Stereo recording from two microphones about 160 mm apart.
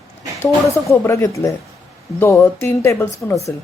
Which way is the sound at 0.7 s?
20° left (ahead or behind).